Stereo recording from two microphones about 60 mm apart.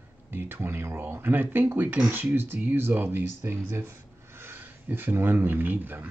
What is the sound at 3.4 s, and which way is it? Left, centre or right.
Speech, right.